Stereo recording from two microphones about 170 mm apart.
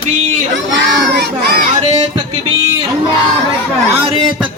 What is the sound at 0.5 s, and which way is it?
Children playing, 90° right.